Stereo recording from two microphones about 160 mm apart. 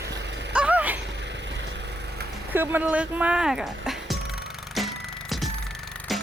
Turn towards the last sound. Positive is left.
turn(degrees=0)  # may be behind; listen again after turning